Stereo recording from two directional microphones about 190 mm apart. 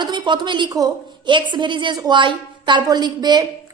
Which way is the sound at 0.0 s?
25° right (ahead or behind).